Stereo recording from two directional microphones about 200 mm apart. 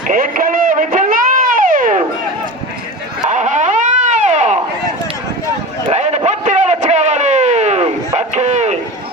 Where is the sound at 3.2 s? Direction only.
35° right (ahead or behind).